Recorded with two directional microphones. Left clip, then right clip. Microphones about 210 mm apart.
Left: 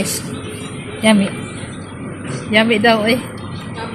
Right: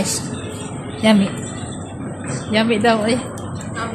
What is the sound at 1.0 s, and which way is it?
Speech, 10° right (ahead or behind).